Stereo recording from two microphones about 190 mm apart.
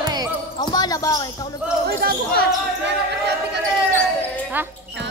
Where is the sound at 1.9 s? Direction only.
55° right (ahead or behind).